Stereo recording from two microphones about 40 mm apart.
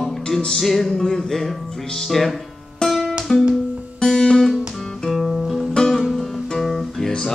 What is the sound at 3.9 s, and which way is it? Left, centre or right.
Guitar, centre.